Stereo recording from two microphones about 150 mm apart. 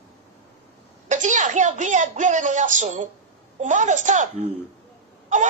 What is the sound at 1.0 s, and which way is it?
Speech, 55° right (ahead or behind).